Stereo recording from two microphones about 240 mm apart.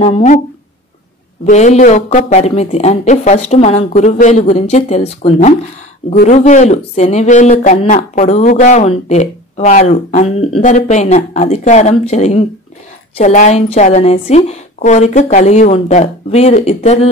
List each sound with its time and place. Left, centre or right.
0.0 s speech: left
1.4 s speech: left